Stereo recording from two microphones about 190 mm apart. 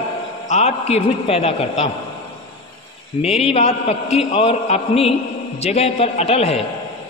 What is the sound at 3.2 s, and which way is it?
A man's voice, 30° left (ahead or behind).